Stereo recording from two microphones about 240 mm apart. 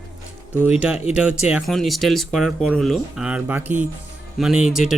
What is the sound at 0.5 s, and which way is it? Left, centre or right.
Speech, centre.